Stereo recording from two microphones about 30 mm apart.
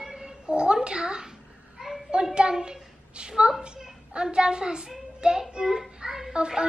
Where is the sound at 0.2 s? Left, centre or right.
Right.